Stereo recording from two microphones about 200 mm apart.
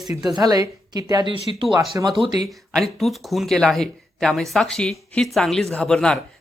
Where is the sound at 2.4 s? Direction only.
Centre (ahead or behind).